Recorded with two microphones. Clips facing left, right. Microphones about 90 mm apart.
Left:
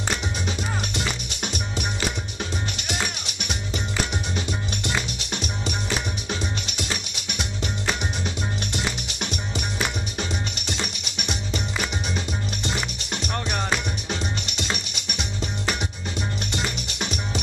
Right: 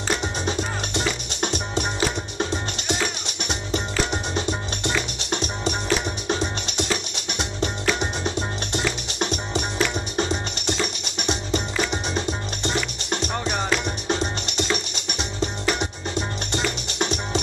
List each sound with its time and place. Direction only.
0.1 s music: 30° right (ahead or behind)
4.1 s music: 30° right (ahead or behind)